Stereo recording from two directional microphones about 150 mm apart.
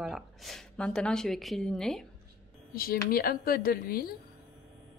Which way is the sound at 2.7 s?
80° left.